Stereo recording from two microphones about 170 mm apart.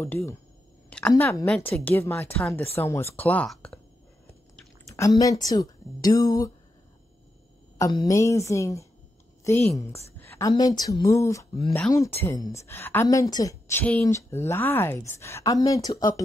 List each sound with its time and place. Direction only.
0.0 s a woman's voice: 15° left (ahead or behind)
5.2 s speech: 20° left (ahead or behind)
7.8 s a woman's voice: 20° left (ahead or behind)
10.1 s a sound: 15° left (ahead or behind)
10.8 s a woman's voice: 20° left (ahead or behind)